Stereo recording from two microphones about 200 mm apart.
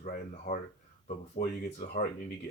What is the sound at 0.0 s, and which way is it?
Speech, 40° left (ahead or behind).